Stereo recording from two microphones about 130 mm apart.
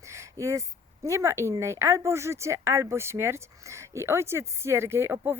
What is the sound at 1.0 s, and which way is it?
Speech, 20° right (ahead or behind).